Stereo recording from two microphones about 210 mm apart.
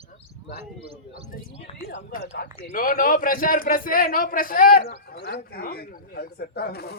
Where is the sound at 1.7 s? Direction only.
25° left (ahead or behind).